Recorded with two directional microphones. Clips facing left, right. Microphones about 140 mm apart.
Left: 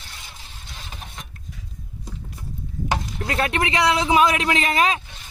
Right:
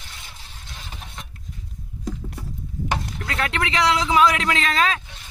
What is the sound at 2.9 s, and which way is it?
Speech, 25° left (ahead or behind).